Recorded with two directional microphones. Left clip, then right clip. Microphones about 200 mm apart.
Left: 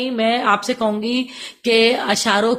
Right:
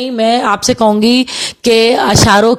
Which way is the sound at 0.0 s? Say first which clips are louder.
Right 6 dB; 40° right (ahead or behind).